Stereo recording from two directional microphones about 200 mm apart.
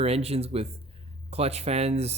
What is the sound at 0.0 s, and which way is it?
Speech, 30° right (ahead or behind).